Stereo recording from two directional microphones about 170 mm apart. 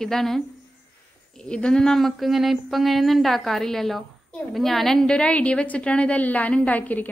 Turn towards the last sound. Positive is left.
turn(degrees=10)  # may be behind; listen again after turning